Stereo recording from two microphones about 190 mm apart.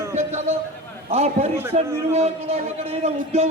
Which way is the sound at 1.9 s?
15° right (ahead or behind).